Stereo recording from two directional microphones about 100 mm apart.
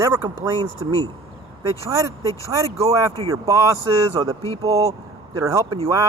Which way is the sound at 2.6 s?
30° right (ahead or behind).